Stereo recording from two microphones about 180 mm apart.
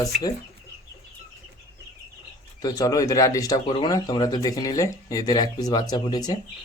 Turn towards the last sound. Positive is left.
turn(degrees=20)  # may be behind; listen again after turning